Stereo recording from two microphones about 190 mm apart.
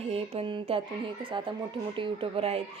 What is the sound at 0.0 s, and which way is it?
Speech, 30° right (ahead or behind).